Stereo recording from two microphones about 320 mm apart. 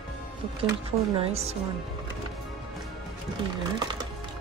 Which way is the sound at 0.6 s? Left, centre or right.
Centre.